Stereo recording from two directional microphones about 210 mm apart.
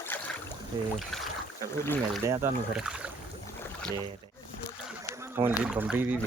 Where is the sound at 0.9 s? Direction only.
Centre (ahead or behind).